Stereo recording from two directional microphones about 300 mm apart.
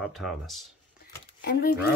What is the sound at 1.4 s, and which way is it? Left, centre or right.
Speech, left.